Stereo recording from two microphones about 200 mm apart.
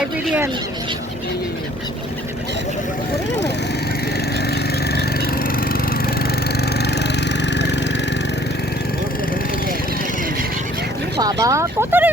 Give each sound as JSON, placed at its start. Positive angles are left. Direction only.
{"t": 0.3, "sound": "speech", "side_deg": -10}
{"t": 6.6, "sound": "engine", "side_deg": 55}
{"t": 11.2, "sound": "speech", "side_deg": -20}